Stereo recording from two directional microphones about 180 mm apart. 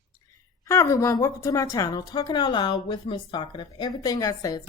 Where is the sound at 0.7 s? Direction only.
15° left (ahead or behind).